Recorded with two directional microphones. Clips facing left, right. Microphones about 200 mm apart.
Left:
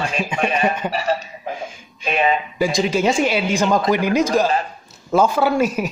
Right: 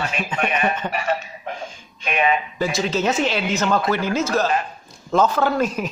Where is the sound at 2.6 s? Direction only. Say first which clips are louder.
Left 3 dB; 15° left (ahead or behind).